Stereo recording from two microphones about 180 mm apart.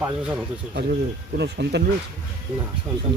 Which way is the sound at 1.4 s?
70° right (ahead or behind).